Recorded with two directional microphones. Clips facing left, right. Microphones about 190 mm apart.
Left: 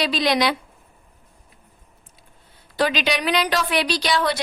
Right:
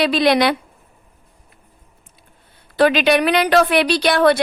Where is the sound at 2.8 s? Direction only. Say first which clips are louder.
Right 8 dB; 60° right (ahead or behind).